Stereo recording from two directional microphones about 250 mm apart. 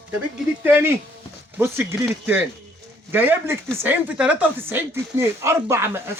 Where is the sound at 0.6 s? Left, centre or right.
Centre.